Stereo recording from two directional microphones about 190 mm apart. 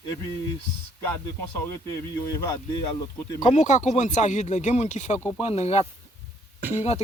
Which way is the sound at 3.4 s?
40° left (ahead or behind).